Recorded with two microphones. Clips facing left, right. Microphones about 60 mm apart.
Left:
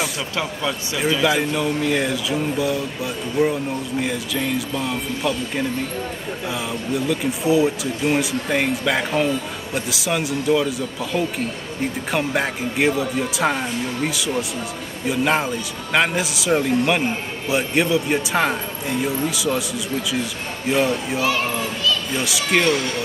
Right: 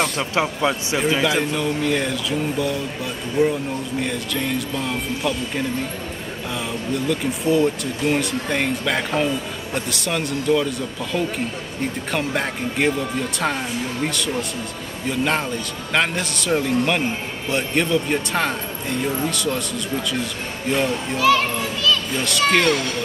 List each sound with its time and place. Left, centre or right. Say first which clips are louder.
0.2 s speech: right 4 dB; right
1.2 s speech: left 1 dB; centre
6.5 s speech: even; centre
20.7 s speech: left 2 dB; centre
21.2 s a child's voice: right 7 dB; right
22.1 s speech: right 2 dB; centre